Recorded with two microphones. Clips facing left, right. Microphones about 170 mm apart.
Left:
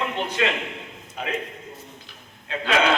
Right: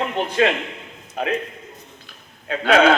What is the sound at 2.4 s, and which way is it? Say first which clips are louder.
Speech: right 6 dB; 55° right (ahead or behind).